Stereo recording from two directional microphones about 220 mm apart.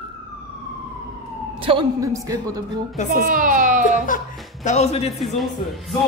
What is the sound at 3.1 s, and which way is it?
Speech, 40° right (ahead or behind).